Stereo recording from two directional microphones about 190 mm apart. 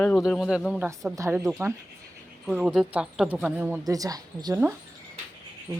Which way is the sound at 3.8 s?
20° right (ahead or behind).